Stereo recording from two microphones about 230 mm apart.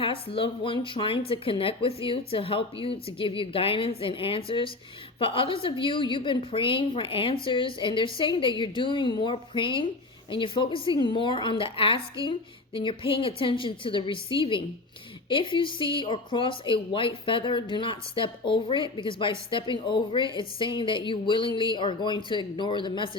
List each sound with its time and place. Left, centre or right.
0.0 s speech: left